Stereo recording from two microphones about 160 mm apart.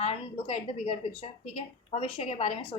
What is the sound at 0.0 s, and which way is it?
A woman's voice, 40° left (ahead or behind).